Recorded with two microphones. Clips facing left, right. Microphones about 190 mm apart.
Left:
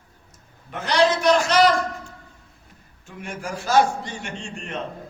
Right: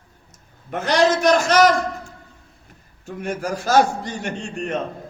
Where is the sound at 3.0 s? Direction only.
40° right (ahead or behind).